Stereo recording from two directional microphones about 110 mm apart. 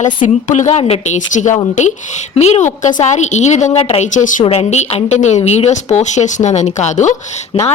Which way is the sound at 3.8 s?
60° left (ahead or behind).